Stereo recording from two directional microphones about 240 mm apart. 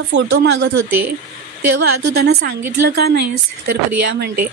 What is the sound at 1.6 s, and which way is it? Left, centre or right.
Speech, right.